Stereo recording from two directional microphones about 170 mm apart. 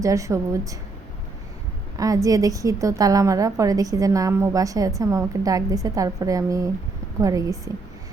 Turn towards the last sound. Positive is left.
turn(degrees=-20)  # may be behind; listen again after turning